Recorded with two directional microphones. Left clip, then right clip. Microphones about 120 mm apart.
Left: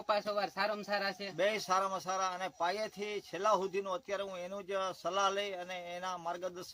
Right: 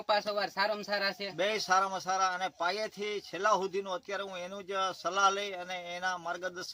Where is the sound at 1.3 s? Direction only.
25° left (ahead or behind).